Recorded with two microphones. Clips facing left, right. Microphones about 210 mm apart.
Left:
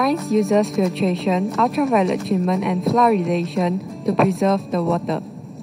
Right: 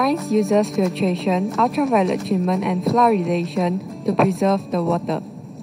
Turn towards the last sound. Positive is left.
turn(degrees=0)  # may be behind; listen again after turning